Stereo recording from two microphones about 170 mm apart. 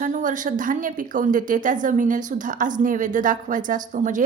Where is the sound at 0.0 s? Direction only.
50° right (ahead or behind).